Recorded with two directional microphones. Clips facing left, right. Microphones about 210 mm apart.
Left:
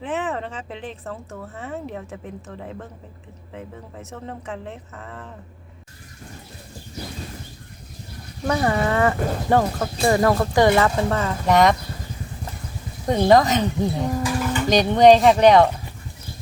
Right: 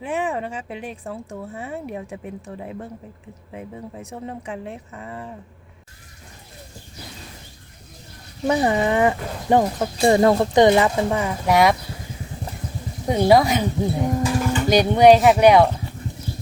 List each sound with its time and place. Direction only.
0.0 s speech: 10° right (ahead or behind)
8.4 s speech: 15° right (ahead or behind)
13.1 s speech: 10° right (ahead or behind)